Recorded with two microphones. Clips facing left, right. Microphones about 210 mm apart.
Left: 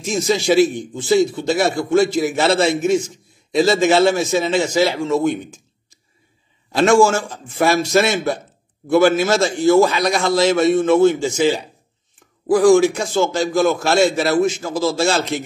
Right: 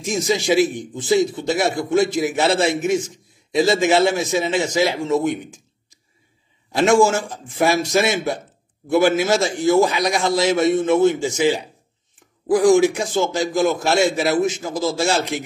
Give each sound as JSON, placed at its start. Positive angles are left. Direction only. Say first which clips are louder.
{"t": 0.0, "sound": "a man's voice", "louder": "left 2 dB", "side_deg": -15}
{"t": 6.7, "sound": "a man's voice", "louder": "left 2 dB", "side_deg": -20}